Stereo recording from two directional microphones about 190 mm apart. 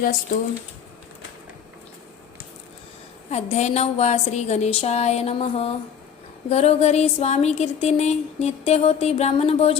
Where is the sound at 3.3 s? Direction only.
35° left (ahead or behind).